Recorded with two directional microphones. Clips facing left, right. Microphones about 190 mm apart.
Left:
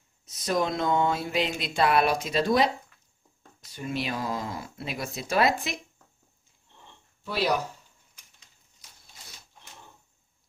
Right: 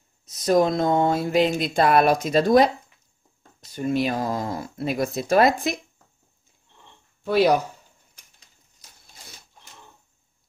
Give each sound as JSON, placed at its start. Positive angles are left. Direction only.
{"t": 0.2, "sound": "speech", "side_deg": -40}
{"t": 3.7, "sound": "speech", "side_deg": -45}
{"t": 7.2, "sound": "speech", "side_deg": -55}